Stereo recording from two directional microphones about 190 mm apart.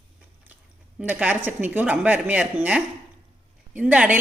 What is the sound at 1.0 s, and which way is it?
A woman's voice, 10° right (ahead or behind).